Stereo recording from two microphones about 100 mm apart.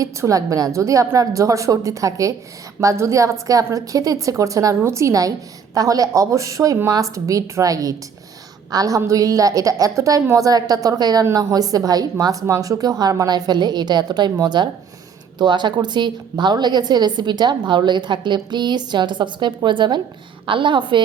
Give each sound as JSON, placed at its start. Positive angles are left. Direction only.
{"t": 0.0, "sound": "a woman's voice", "side_deg": -35}